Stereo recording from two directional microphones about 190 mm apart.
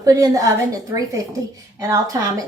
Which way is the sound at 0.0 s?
20° right (ahead or behind).